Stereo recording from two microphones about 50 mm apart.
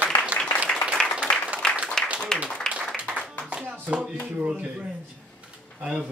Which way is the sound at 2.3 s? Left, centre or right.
Centre.